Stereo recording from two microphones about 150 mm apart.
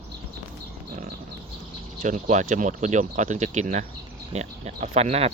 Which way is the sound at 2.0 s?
55° right (ahead or behind).